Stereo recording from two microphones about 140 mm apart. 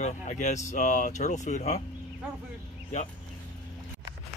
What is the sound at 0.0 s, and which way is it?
Speech, 55° left (ahead or behind).